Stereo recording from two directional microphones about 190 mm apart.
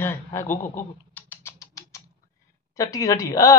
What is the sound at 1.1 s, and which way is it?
Rodents, 10° left (ahead or behind).